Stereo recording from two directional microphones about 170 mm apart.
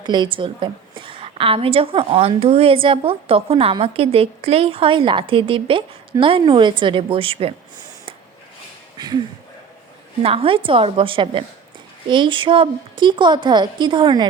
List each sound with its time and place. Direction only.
0.0 s a woman's voice: 25° right (ahead or behind)
10.2 s a woman's voice: 30° right (ahead or behind)